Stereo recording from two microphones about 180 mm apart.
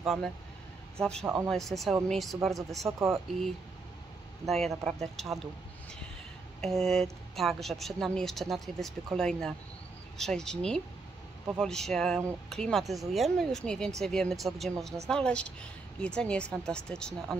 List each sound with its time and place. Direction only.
0.0 s speech: centre (ahead or behind)
1.2 s speech: 15° right (ahead or behind)
1.5 s a woman's voice: centre (ahead or behind)
4.5 s a woman's voice: centre (ahead or behind)
6.6 s a woman's voice: centre (ahead or behind)